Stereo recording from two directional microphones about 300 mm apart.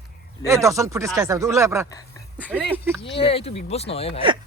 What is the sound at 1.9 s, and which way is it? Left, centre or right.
Speech, centre.